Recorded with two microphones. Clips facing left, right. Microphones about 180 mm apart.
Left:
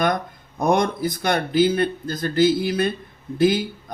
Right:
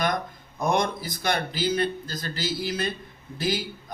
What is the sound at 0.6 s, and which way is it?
Speech, 55° left (ahead or behind).